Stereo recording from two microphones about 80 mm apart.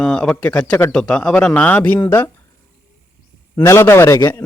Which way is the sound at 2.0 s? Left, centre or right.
Left.